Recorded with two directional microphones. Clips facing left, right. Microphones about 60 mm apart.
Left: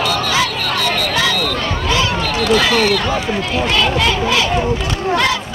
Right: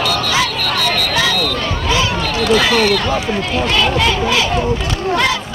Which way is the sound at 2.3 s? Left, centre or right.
Centre.